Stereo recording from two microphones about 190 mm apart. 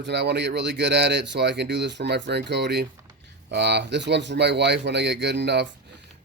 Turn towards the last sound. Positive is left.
turn(degrees=-60)  # may be behind; listen again after turning